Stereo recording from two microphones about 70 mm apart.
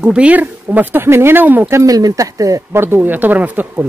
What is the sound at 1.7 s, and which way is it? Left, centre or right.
Speech, right.